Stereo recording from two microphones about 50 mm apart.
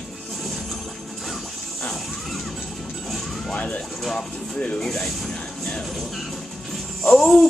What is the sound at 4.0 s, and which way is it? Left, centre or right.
Speech, centre.